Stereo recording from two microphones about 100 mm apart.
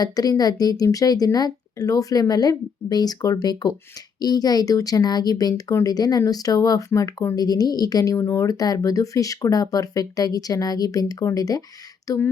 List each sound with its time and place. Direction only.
0.0 s a woman's voice: 40° left (ahead or behind)